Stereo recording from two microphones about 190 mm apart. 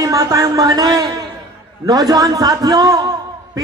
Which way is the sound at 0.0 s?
15° right (ahead or behind).